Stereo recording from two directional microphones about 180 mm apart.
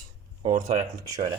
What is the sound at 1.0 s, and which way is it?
Speech, 20° right (ahead or behind).